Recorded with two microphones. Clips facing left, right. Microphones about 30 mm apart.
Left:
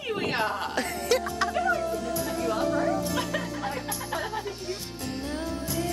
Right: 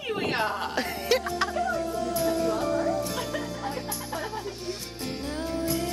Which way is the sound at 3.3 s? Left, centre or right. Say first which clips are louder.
Left 1 dB; left.